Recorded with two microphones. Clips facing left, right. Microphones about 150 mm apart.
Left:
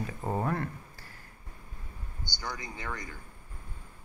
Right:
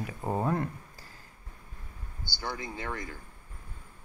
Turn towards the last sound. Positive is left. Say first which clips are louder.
# right 3 dB
turn(degrees=-25)  # may be behind; listen again after turning